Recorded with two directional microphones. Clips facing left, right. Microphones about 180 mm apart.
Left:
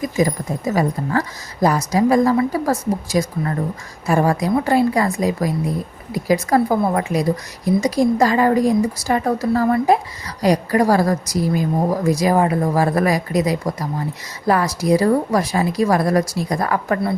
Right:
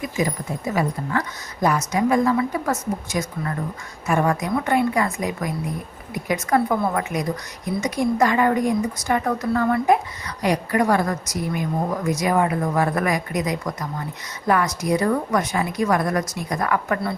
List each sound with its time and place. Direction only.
0.0 s a woman's voice: 40° left (ahead or behind)